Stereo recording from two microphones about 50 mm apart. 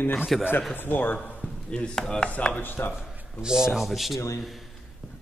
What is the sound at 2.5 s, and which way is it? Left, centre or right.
Speech, left.